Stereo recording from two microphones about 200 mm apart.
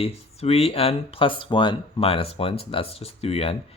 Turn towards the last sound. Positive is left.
turn(degrees=30)  # may be behind; listen again after turning